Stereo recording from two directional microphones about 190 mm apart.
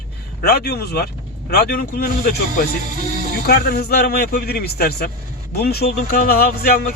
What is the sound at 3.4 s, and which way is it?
A man's voice, 55° left (ahead or behind).